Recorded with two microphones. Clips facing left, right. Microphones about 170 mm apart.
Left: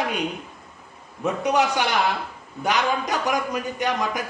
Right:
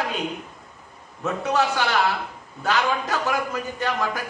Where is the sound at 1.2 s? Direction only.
15° left (ahead or behind).